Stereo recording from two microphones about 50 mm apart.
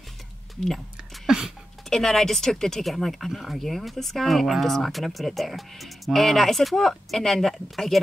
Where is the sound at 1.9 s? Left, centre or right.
Centre.